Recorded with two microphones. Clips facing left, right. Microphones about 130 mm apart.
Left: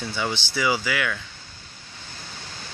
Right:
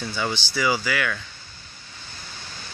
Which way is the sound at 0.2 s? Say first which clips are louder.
Even; 20° left (ahead or behind).